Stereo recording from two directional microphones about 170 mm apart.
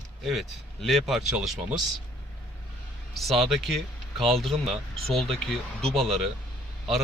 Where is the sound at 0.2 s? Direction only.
Centre (ahead or behind).